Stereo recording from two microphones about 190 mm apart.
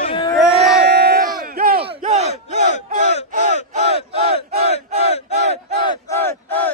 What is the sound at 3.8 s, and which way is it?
Battle cry, 35° right (ahead or behind).